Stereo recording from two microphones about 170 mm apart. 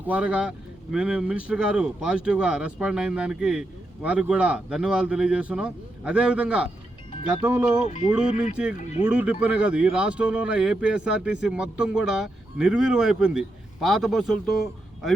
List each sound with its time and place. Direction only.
0.0 s speech: 10° right (ahead or behind)
7.8 s music: 40° left (ahead or behind)
9.0 s a man's voice: 5° right (ahead or behind)